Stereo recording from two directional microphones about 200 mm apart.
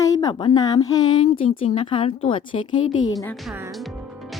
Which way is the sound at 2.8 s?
85° left.